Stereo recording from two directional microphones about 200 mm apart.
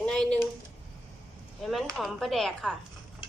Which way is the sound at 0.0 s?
5° left (ahead or behind).